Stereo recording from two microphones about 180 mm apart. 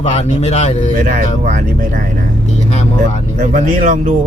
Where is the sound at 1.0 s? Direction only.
50° right (ahead or behind).